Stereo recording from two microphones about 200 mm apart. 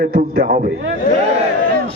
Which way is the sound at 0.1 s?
45° right (ahead or behind).